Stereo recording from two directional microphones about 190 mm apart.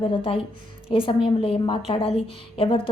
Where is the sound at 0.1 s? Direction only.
30° left (ahead or behind).